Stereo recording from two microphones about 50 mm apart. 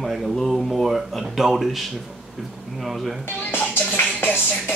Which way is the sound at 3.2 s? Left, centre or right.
Left.